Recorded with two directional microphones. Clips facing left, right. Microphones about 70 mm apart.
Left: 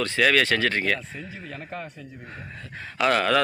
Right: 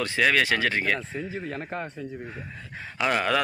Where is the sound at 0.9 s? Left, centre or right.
Right.